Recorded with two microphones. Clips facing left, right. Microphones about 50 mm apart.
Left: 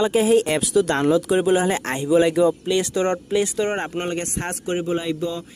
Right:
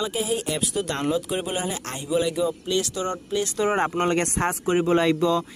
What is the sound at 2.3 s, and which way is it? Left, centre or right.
Speech, left.